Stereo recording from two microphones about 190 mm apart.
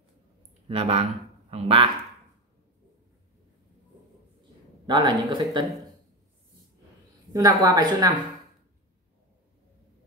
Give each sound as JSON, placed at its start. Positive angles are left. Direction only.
{"t": 0.7, "sound": "speech", "side_deg": -30}
{"t": 4.8, "sound": "speech", "side_deg": -25}
{"t": 7.3, "sound": "speech", "side_deg": -20}